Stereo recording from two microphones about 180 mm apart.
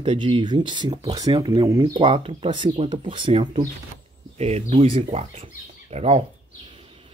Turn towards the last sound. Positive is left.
turn(degrees=-35)  # may be behind; listen again after turning